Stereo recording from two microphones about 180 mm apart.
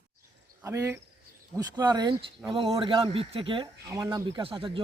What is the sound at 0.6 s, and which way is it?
Cricket, 15° right (ahead or behind).